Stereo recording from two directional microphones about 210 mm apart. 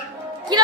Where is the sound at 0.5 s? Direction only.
20° right (ahead or behind).